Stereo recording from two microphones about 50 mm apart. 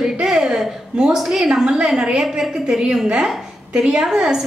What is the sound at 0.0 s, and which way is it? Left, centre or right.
A woman's voice, centre.